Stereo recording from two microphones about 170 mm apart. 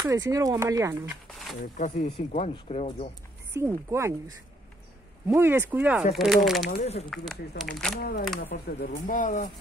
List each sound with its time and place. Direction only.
0.0 s speech: 20° right (ahead or behind)
1.2 s a sound: centre (ahead or behind)
1.6 s speech: 45° left (ahead or behind)
3.5 s speech: 15° right (ahead or behind)
5.3 s speech: 15° right (ahead or behind)
6.8 s speech: 40° left (ahead or behind)
7.1 s speech: centre (ahead or behind)
8.0 s speech: 60° left (ahead or behind)
8.5 s speech: 70° left (ahead or behind)
8.9 s speech: 50° left (ahead or behind)